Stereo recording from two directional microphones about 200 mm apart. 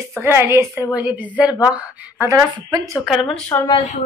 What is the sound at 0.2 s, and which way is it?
A woman's voice, 15° right (ahead or behind).